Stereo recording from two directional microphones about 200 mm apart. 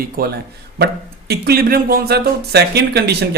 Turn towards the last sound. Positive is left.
turn(degrees=-55)  # may be behind; listen again after turning